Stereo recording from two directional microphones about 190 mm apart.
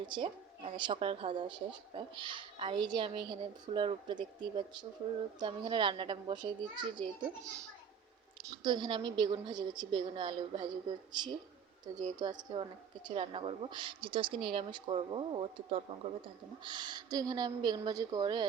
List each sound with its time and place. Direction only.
0.0 s a woman's voice: 25° right (ahead or behind)
8.6 s a woman's voice: 25° right (ahead or behind)